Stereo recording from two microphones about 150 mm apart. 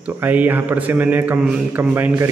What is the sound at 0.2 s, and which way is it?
Speech, 10° right (ahead or behind).